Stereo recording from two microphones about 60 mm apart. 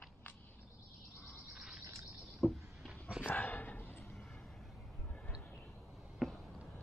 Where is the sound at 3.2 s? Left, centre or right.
Left.